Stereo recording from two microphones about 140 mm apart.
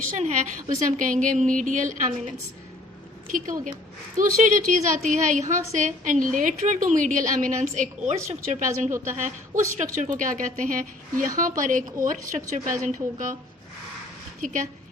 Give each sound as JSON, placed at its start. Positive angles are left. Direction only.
{"t": 0.1, "sound": "a woman's voice", "side_deg": -60}
{"t": 3.3, "sound": "a woman's voice", "side_deg": -70}
{"t": 14.4, "sound": "a woman's voice", "side_deg": -70}